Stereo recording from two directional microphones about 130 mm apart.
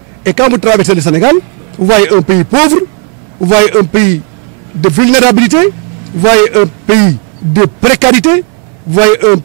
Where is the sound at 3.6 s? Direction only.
10° right (ahead or behind).